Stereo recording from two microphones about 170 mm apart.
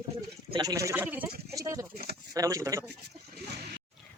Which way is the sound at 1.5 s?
20° right (ahead or behind).